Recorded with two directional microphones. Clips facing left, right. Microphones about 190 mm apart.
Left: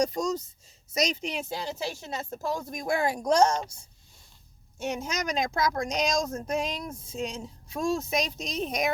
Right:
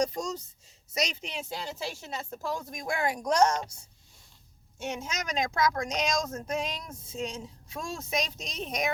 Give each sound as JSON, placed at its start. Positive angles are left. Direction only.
{"t": 0.0, "sound": "speech", "side_deg": 40}
{"t": 4.8, "sound": "speech", "side_deg": 35}